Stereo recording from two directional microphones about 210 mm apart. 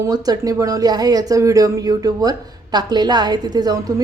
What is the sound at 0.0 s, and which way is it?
A woman's voice, 20° right (ahead or behind).